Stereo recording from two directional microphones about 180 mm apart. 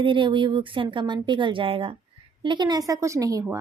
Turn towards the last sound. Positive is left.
turn(degrees=-20)  # may be behind; listen again after turning